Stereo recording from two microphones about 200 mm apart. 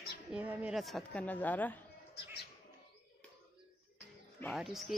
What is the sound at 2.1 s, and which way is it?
Bird, 55° left (ahead or behind).